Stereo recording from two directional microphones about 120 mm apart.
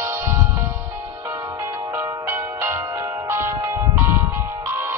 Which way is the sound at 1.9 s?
20° right (ahead or behind).